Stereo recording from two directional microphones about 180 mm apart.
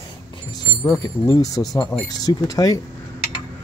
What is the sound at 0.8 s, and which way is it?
Speech, 20° left (ahead or behind).